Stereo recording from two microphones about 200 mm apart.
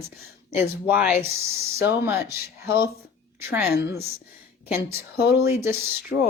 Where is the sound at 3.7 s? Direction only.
55° left (ahead or behind).